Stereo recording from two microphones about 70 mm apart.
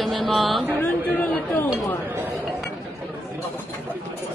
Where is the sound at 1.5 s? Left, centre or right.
Left.